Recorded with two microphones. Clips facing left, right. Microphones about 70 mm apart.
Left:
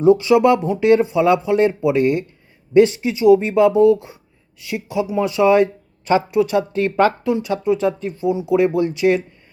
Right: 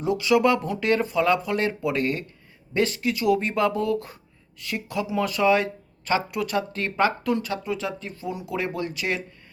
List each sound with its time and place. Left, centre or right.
0.0 s speech: left